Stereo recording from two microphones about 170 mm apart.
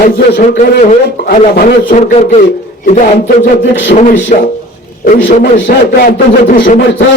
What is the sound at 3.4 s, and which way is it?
Speech, 90° left.